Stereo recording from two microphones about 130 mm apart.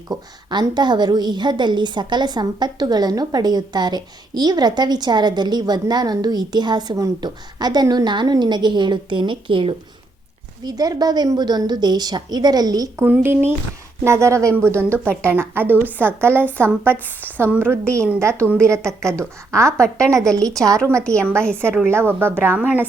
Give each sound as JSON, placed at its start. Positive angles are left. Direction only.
{"t": 0.1, "sound": "a woman's voice", "side_deg": -35}
{"t": 10.6, "sound": "a woman's voice", "side_deg": -30}
{"t": 13.1, "sound": "a woman's voice", "side_deg": -15}
{"t": 16.4, "sound": "a woman's voice", "side_deg": 10}
{"t": 17.3, "sound": "speech", "side_deg": -15}
{"t": 17.8, "sound": "a woman's voice", "side_deg": 10}
{"t": 18.2, "sound": "a woman's voice", "side_deg": -20}
{"t": 18.4, "sound": "a woman's voice", "side_deg": 5}
{"t": 18.7, "sound": "a woman's voice", "side_deg": -20}
{"t": 20.4, "sound": "a woman's voice", "side_deg": 5}
{"t": 21.8, "sound": "speech", "side_deg": -20}